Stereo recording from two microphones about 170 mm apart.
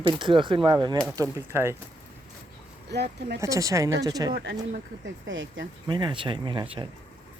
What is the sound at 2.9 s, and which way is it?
Speech, 75° right (ahead or behind).